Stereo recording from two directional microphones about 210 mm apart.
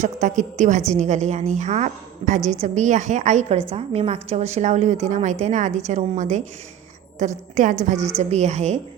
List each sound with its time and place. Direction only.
0.0 s a woman's voice: 35° right (ahead or behind)
7.9 s a woman's voice: 15° right (ahead or behind)
8.2 s a woman's voice: 35° right (ahead or behind)